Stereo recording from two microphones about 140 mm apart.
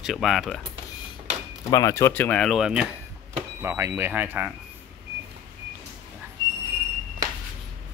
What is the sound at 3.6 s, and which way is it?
Speech, 20° right (ahead or behind).